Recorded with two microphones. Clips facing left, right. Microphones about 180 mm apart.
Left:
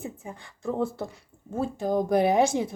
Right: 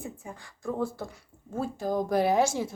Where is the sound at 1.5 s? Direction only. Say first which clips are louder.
Left 3 dB; 20° left (ahead or behind).